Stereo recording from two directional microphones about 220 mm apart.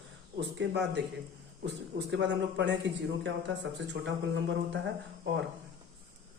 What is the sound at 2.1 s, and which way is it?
Speech, 55° right (ahead or behind).